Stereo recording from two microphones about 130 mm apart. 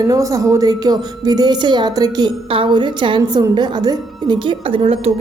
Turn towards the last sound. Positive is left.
turn(degrees=-50)  # may be behind; listen again after turning